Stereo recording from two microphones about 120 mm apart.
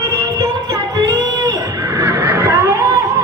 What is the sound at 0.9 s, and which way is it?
Music, 30° right (ahead or behind).